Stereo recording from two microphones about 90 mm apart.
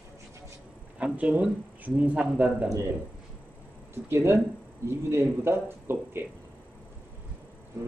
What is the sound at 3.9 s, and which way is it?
Speech, 30° right (ahead or behind).